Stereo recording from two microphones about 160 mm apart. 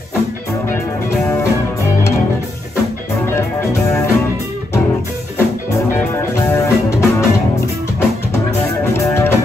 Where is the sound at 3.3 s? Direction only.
20° left (ahead or behind).